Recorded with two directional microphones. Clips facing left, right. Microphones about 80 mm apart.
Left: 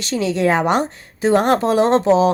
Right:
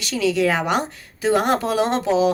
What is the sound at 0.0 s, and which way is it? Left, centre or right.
A woman's voice, left.